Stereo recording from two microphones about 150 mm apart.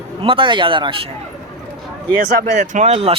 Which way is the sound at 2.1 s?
90° right.